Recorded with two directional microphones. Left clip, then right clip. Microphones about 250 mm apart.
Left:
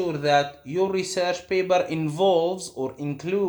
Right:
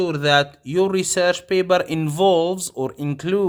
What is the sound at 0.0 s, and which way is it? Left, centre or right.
Speech, right.